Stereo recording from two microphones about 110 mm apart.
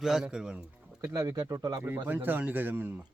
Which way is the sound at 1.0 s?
30° right (ahead or behind).